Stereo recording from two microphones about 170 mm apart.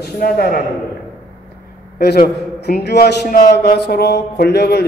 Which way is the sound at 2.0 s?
70° left (ahead or behind).